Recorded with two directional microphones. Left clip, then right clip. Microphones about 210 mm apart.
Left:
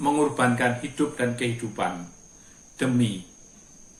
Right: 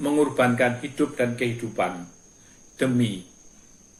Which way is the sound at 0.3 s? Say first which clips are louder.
Right 2 dB; 15° left (ahead or behind).